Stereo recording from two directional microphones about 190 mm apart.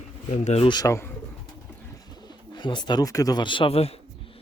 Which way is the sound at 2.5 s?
25° left (ahead or behind).